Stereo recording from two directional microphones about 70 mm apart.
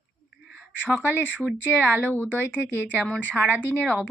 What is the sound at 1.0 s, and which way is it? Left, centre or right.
Speech, left.